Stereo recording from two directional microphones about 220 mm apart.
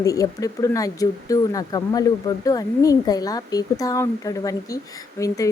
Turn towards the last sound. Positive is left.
turn(degrees=15)  # may be behind; listen again after turning